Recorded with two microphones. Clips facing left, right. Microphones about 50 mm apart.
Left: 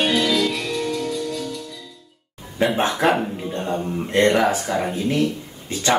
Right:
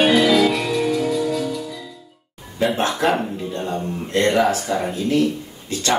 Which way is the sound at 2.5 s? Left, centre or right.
Centre.